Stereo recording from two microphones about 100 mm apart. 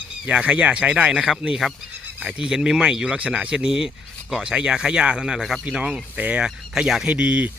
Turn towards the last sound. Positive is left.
turn(degrees=-10)  # may be behind; listen again after turning